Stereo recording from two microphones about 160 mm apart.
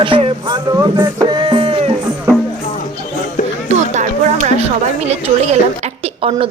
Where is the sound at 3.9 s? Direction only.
50° right (ahead or behind).